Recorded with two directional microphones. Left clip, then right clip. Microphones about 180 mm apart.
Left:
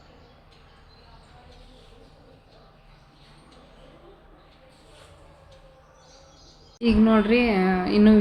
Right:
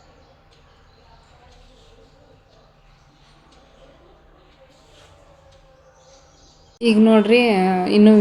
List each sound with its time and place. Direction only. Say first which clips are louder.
6.7 s a woman's voice: right 6 dB; 15° right (ahead or behind)